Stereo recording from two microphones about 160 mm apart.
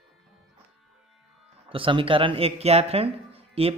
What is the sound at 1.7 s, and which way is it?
Speech, 35° right (ahead or behind).